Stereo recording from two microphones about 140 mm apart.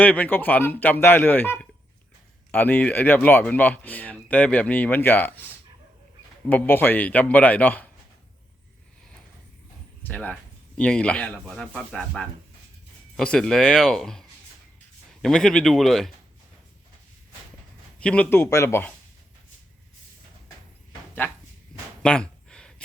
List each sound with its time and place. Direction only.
0.0 s speech: 10° left (ahead or behind)
6.5 s speech: 15° left (ahead or behind)
10.0 s speech: 10° left (ahead or behind)
18.0 s speech: 10° left (ahead or behind)
21.2 s speech: 15° left (ahead or behind)
22.0 s a sound: 5° left (ahead or behind)